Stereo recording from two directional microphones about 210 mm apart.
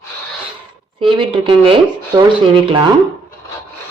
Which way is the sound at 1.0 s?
25° right (ahead or behind).